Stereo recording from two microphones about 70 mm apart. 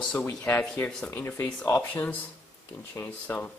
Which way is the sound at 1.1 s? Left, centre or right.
Left.